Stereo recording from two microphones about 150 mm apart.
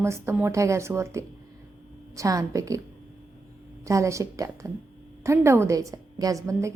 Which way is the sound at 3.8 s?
20° right (ahead or behind).